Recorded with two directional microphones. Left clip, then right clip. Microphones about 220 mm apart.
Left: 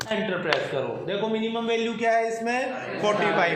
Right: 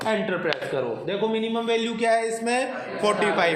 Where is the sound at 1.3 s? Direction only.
40° right (ahead or behind).